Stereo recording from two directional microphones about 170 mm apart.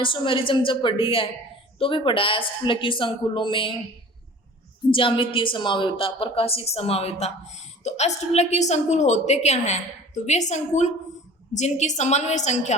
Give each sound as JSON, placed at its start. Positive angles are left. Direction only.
{"t": 0.0, "sound": "a woman's voice", "side_deg": 30}
{"t": 4.9, "sound": "a woman's voice", "side_deg": 30}